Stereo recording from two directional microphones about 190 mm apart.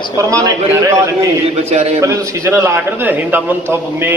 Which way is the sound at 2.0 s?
15° right (ahead or behind).